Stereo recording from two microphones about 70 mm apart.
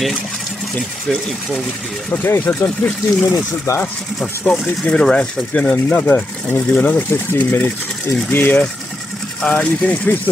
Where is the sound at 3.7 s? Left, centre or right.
Left.